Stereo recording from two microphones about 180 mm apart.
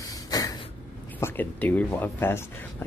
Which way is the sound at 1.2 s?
10° left (ahead or behind).